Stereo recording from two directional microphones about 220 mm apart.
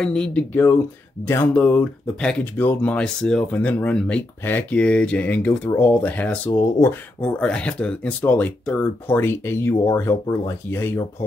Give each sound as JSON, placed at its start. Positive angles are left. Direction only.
{"t": 0.0, "sound": "speech", "side_deg": 5}